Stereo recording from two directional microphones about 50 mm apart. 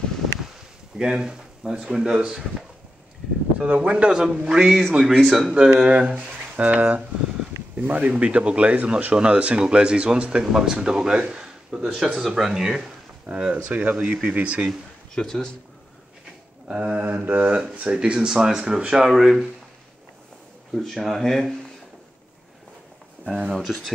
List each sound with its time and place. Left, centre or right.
0.9 s speech: centre
3.5 s speech: right
4.1 s speech: centre
5.5 s speech: centre
13.3 s speech: right
15.1 s a man's voice: centre
16.6 s a sound: right
17.0 s a sound: right
17.7 s speech: right
19.0 s speech: centre
20.7 s speech: centre
23.5 s speech: centre